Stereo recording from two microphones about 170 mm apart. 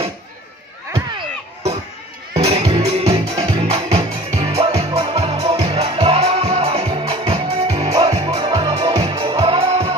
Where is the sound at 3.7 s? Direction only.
35° right (ahead or behind).